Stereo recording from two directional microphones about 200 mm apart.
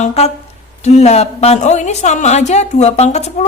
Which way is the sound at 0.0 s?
30° left (ahead or behind).